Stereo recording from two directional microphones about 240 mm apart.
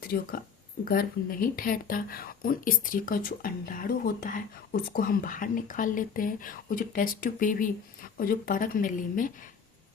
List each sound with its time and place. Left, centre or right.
0.0 s speech: left